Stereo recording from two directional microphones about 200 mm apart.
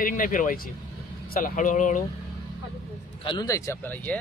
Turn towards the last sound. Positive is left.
turn(degrees=10)  # may be behind; listen again after turning